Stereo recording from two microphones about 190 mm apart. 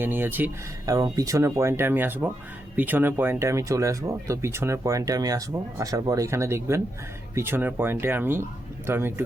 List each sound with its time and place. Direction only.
0.0 s speech: 10° right (ahead or behind)